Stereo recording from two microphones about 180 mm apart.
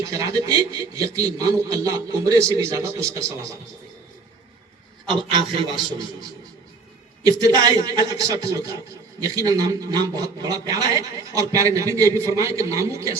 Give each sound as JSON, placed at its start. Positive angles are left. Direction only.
{"t": 0.0, "sound": "a man's voice", "side_deg": -20}
{"t": 5.1, "sound": "a man's voice", "side_deg": -30}
{"t": 7.3, "sound": "a man's voice", "side_deg": -20}